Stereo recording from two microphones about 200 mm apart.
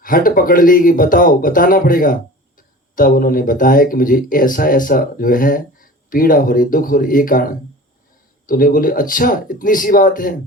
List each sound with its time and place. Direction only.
0.0 s speech: 45° left (ahead or behind)